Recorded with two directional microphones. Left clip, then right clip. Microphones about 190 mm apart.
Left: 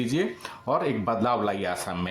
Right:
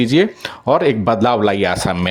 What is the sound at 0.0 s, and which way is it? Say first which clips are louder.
Speech: right 13 dB; 40° right (ahead or behind).